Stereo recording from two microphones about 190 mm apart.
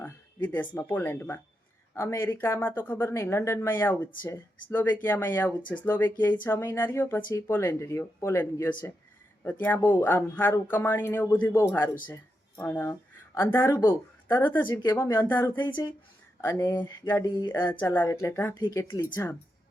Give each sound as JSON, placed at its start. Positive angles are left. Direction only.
{"t": 0.0, "sound": "speech", "side_deg": 10}